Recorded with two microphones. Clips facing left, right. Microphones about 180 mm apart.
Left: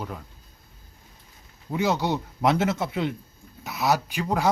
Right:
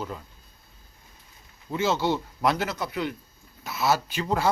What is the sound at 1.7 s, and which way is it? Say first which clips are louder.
A man's voice: even; 15° left (ahead or behind).